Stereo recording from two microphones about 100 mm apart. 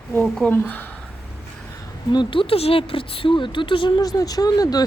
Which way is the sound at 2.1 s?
60° left (ahead or behind).